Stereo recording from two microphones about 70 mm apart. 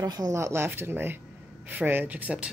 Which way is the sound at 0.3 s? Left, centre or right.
Right.